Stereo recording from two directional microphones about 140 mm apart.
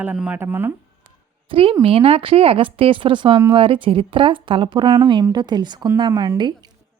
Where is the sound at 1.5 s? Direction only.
40° right (ahead or behind).